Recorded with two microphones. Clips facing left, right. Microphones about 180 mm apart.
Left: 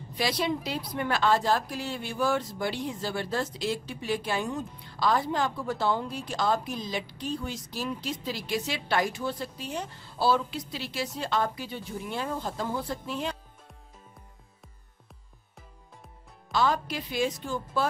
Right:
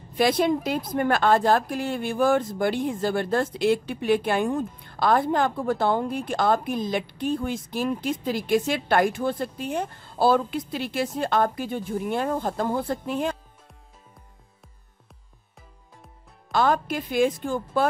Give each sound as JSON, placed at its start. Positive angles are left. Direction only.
{"t": 0.1, "sound": "a woman's voice", "side_deg": -50}
{"t": 16.5, "sound": "a woman's voice", "side_deg": -50}